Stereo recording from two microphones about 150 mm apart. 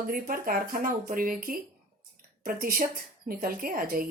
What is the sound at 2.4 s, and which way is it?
Speech, 70° right (ahead or behind).